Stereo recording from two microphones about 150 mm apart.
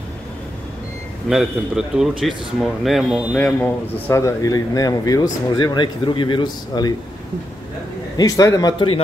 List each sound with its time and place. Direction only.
1.3 s speech: 5° right (ahead or behind); by 6.9 s 30° left (ahead or behind)
8.2 s speech: 25° left (ahead or behind)